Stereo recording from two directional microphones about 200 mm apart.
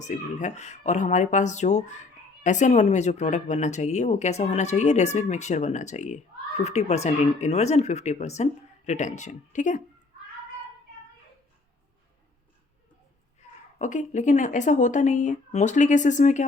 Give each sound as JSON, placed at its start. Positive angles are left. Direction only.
{"t": 0.0, "sound": "speech", "side_deg": 35}
{"t": 13.7, "sound": "speech", "side_deg": 40}